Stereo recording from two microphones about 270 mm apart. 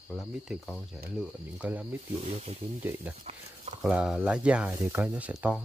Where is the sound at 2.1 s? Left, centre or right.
Right.